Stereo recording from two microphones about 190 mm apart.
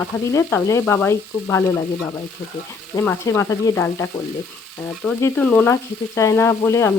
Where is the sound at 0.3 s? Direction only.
15° left (ahead or behind).